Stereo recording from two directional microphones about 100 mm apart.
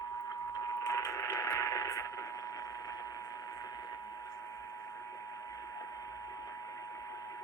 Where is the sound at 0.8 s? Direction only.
35° left (ahead or behind).